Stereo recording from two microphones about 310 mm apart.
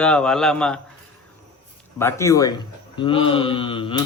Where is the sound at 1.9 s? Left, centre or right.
Centre.